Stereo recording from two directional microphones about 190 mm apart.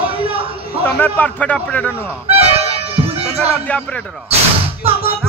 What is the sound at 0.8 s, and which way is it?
Speech, 10° left (ahead or behind).